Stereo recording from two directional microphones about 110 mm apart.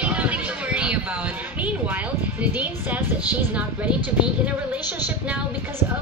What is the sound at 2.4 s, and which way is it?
Music, 15° right (ahead or behind).